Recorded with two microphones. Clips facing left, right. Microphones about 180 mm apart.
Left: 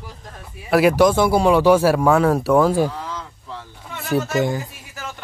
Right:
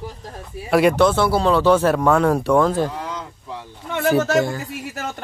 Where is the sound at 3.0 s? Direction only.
15° right (ahead or behind).